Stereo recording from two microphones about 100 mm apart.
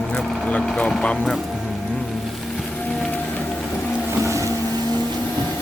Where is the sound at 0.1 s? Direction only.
10° left (ahead or behind).